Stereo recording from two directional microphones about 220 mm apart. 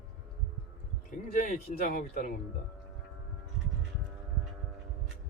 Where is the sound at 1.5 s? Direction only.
40° left (ahead or behind).